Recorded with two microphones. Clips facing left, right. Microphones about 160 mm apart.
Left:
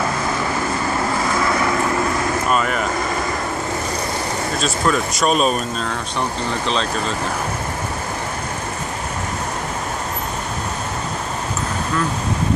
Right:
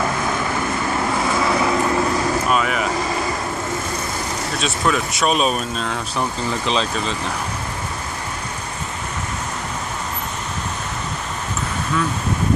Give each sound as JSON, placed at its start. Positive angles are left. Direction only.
{"t": 2.5, "sound": "vehicle", "side_deg": -5}
{"t": 4.6, "sound": "speech", "side_deg": 0}